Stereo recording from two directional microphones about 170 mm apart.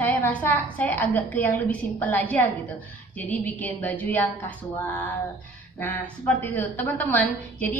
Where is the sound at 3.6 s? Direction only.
10° left (ahead or behind).